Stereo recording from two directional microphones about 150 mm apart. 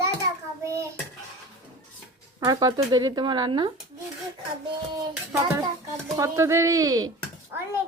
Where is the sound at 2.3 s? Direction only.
25° right (ahead or behind).